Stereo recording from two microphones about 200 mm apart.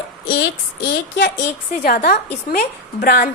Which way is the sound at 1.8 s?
50° left (ahead or behind).